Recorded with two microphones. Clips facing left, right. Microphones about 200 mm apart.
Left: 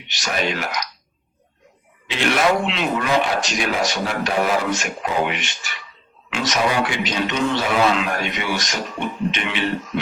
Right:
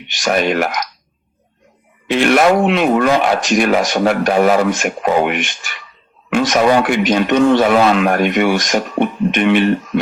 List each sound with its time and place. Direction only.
0.1 s a man's voice: 50° right (ahead or behind)
2.0 s a man's voice: 55° right (ahead or behind)